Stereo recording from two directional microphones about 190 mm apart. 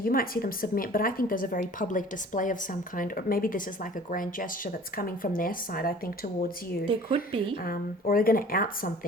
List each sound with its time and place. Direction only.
0.0 s a woman's voice: 50° left (ahead or behind)
6.9 s speech: 25° right (ahead or behind)
7.6 s a woman's voice: 50° left (ahead or behind)